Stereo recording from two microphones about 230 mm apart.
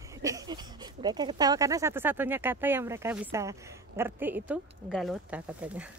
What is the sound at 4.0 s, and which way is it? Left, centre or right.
Speech, centre.